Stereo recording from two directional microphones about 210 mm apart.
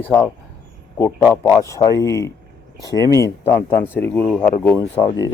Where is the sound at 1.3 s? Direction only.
10° left (ahead or behind).